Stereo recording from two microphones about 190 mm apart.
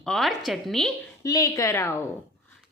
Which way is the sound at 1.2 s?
15° left (ahead or behind).